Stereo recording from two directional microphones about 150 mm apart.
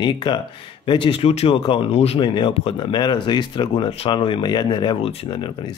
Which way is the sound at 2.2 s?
30° left (ahead or behind).